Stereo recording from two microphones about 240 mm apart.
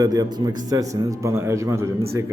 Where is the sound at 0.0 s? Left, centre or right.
Centre.